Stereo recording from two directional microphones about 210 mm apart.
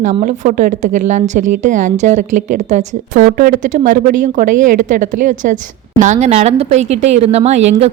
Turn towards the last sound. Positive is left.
turn(degrees=-30)  # may be behind; listen again after turning